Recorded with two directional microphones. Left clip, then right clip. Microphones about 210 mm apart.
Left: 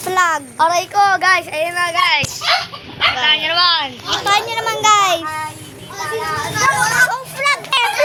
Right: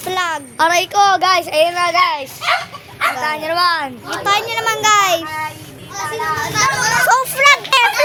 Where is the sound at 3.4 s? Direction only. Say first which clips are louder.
Left 1 dB; 50° right (ahead or behind).